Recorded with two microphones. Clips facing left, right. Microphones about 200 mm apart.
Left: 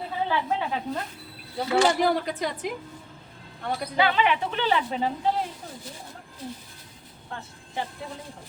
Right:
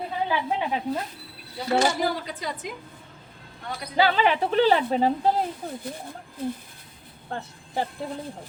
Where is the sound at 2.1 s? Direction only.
65° left (ahead or behind).